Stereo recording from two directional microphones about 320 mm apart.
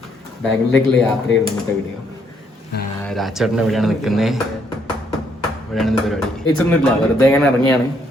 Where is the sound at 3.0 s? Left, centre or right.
Centre.